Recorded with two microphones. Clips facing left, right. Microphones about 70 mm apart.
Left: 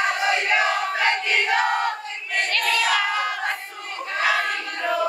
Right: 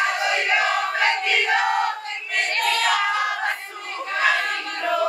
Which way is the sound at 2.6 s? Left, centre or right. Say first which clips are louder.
Right 2 dB; right.